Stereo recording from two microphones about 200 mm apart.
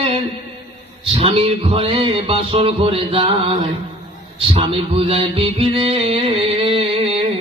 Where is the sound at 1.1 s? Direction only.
30° right (ahead or behind).